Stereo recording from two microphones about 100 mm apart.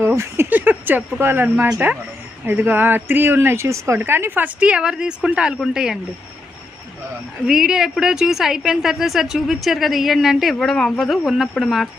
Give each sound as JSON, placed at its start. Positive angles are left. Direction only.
{"t": 0.0, "sound": "a woman's voice", "side_deg": -25}
{"t": 7.4, "sound": "a woman's voice", "side_deg": -5}